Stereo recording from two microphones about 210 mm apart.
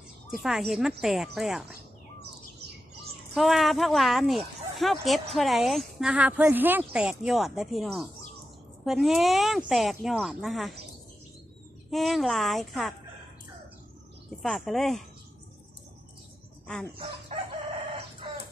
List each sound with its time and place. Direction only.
0.4 s speech: centre (ahead or behind)
3.3 s speech: centre (ahead or behind)
11.9 s speech: centre (ahead or behind)
14.4 s speech: centre (ahead or behind)
17.3 s chicken: 30° right (ahead or behind)
18.2 s a sound: 25° right (ahead or behind)